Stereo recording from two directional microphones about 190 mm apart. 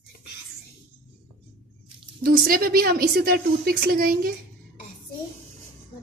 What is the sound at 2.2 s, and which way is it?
A woman's voice, 50° right (ahead or behind).